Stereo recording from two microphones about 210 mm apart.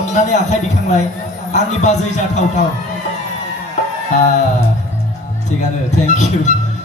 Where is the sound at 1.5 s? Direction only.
35° left (ahead or behind).